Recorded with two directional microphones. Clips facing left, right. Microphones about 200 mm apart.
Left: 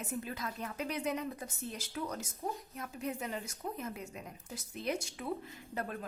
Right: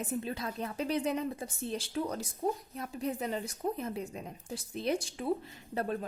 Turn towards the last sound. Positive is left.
turn(degrees=-30)  # may be behind; listen again after turning